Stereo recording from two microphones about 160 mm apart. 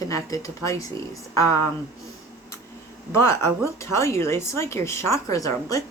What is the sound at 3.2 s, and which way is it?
Speech, 15° left (ahead or behind).